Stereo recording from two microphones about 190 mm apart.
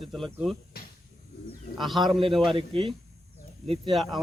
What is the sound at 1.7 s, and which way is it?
Speech, centre (ahead or behind).